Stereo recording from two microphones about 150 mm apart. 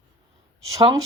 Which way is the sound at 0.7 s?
25° right (ahead or behind).